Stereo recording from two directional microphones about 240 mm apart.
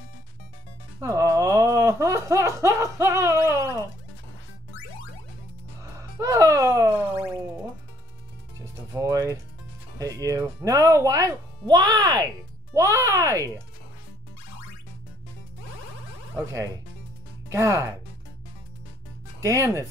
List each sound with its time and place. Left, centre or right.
1.0 s music: centre
5.9 s music: centre
8.9 s music: centre
9.9 s speech: centre
16.3 s speech: centre
19.4 s speech: centre